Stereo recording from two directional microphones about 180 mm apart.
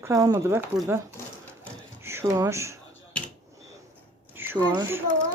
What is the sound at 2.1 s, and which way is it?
Speech, 15° right (ahead or behind).